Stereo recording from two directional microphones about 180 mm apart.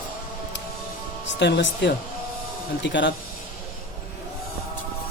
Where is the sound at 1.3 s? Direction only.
75° left (ahead or behind).